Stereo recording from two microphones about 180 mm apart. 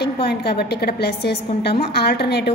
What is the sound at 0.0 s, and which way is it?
A woman's voice, 65° left (ahead or behind).